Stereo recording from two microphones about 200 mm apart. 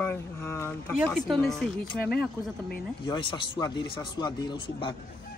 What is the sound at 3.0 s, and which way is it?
Speech, 20° left (ahead or behind).